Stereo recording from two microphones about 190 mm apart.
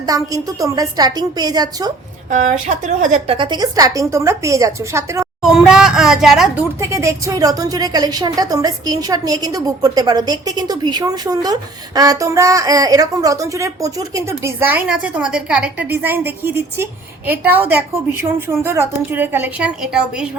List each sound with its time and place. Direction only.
0.0 s a woman's voice: 20° right (ahead or behind)
2.3 s a woman's voice: 40° right (ahead or behind)
3.3 s a woman's voice: 25° right (ahead or behind)
5.4 s speech: centre (ahead or behind)
6.7 s a woman's voice: 15° right (ahead or behind)